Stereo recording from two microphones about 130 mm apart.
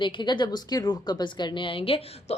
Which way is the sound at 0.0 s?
35° left (ahead or behind).